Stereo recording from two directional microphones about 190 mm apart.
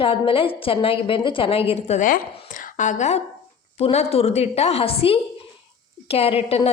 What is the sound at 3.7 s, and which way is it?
A woman's voice, 30° left (ahead or behind).